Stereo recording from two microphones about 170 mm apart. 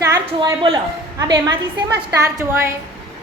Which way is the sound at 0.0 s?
25° right (ahead or behind).